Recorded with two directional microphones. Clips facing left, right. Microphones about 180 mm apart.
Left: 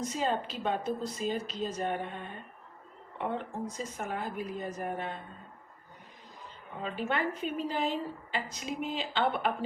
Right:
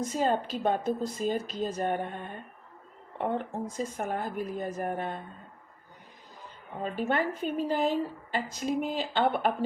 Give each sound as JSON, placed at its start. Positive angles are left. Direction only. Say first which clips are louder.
{"t": 0.0, "sound": "a woman's voice", "louder": "right 4 dB", "side_deg": -50}
{"t": 3.2, "sound": "a woman's voice", "louder": "right 3 dB", "side_deg": -45}
{"t": 6.8, "sound": "a woman's voice", "louder": "right 3 dB", "side_deg": -45}